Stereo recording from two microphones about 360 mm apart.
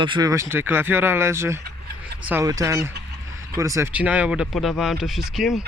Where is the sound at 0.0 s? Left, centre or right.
Centre.